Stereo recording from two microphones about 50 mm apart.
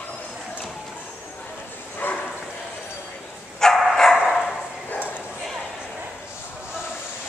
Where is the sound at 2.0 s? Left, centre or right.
Left.